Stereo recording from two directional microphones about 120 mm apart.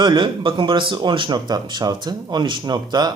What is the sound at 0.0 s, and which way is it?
Speech, 40° right (ahead or behind).